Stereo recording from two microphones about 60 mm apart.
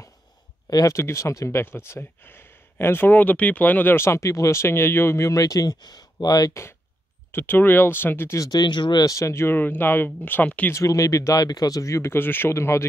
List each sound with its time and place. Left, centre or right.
0.7 s speech: left
0.9 s speech: left
1.6 s speech: left
5.2 s speech: left
7.3 s speech: left
9.0 s speech: left
9.6 s speech: left
10.7 s speech: left
12.1 s speech: left
12.5 s speech: left